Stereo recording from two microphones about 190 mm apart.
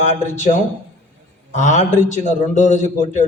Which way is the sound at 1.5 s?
40° left (ahead or behind).